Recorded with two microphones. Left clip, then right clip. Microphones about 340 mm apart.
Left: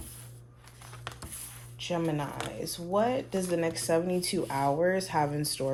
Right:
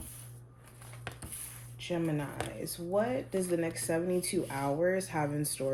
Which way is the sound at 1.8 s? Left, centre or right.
Left.